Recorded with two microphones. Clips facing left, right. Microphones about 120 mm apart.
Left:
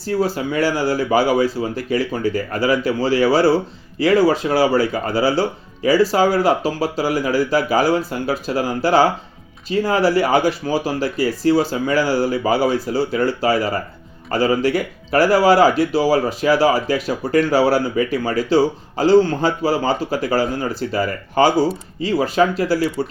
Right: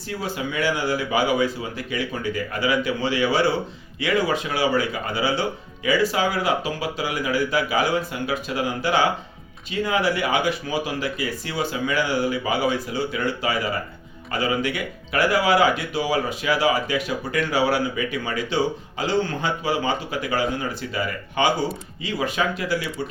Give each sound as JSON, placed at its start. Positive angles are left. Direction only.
{"t": 0.0, "sound": "speech", "side_deg": 35}